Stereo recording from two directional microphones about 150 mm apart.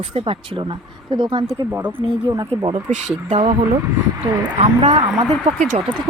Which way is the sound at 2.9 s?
55° right (ahead or behind).